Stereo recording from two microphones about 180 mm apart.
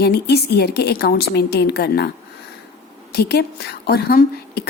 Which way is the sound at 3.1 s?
60° left (ahead or behind).